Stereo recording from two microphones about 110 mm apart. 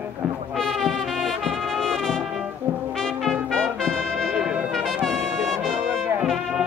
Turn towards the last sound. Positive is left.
turn(degrees=-5)  # may be behind; listen again after turning